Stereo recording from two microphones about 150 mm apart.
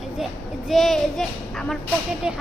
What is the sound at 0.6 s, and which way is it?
A woman's voice, centre (ahead or behind).